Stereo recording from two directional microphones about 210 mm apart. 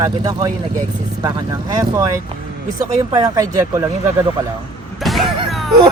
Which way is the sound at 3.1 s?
15° right (ahead or behind).